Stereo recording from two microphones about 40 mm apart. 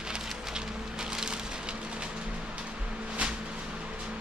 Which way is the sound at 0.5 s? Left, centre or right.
Centre.